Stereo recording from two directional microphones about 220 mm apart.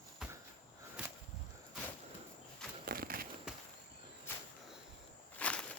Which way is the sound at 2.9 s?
40° right (ahead or behind).